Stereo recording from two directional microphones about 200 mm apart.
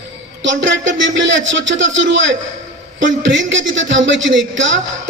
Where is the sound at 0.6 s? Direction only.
65° right (ahead or behind).